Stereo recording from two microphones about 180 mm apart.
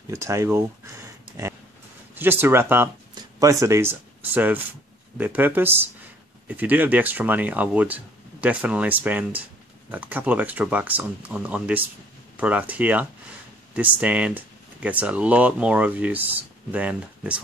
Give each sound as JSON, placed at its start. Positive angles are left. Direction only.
{"t": 0.1, "sound": "speech", "side_deg": -15}